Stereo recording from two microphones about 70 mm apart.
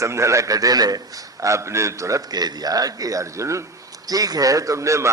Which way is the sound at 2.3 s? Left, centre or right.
Right.